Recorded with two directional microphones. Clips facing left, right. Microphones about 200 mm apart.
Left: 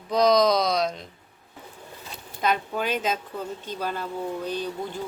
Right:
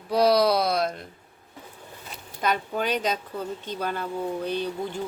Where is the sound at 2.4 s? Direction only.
45° right (ahead or behind).